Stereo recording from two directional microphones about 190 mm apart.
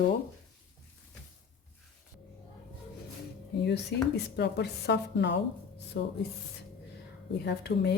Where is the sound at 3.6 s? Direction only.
60° left (ahead or behind).